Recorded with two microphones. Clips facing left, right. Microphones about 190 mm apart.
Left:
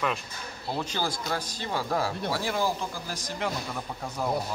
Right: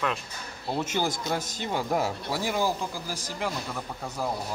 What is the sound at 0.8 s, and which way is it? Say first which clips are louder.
Speech: right 3 dB; 20° right (ahead or behind).